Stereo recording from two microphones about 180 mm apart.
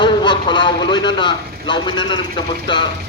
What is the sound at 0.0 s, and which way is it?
A man's voice, 25° left (ahead or behind).